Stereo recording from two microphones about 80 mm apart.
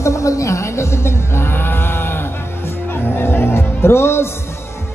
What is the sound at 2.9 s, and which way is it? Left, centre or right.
Music, left.